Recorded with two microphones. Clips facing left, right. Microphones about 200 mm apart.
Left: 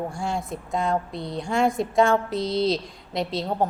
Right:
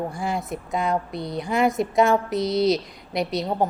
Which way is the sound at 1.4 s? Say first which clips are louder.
Right 1 dB; centre (ahead or behind).